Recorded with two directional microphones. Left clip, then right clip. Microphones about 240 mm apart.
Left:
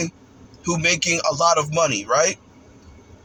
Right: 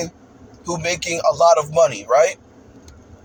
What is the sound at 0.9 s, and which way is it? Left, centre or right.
Speech, centre.